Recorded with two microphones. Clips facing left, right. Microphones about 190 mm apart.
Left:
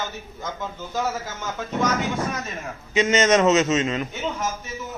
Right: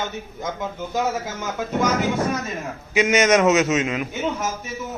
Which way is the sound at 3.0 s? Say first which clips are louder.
Right 1 dB; 10° right (ahead or behind).